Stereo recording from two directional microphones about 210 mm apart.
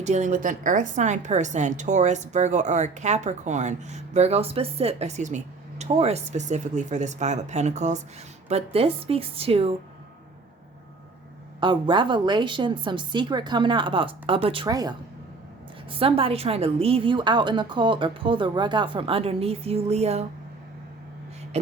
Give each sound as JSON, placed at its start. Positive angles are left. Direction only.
{"t": 0.0, "sound": "a woman's voice", "side_deg": -35}
{"t": 11.6, "sound": "a woman's voice", "side_deg": -25}
{"t": 21.5, "sound": "a woman's voice", "side_deg": -30}